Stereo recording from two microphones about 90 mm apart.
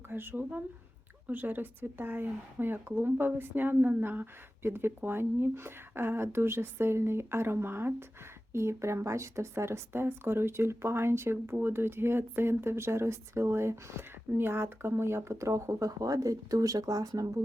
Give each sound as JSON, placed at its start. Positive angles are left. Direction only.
{"t": 0.1, "sound": "speech", "side_deg": -25}